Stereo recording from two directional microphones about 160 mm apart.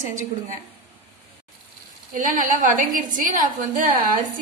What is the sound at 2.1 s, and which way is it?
A woman's voice, 60° right (ahead or behind).